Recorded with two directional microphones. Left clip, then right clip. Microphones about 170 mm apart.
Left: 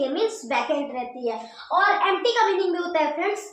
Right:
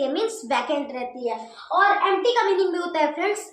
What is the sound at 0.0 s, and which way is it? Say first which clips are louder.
A woman's voice: even; 35° right (ahead or behind).